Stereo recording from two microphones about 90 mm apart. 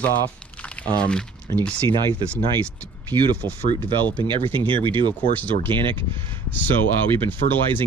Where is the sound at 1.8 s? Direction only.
55° right (ahead or behind).